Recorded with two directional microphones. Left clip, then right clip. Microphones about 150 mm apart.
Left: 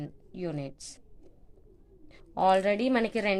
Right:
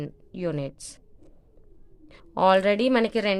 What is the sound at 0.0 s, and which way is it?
Speech, 60° right (ahead or behind).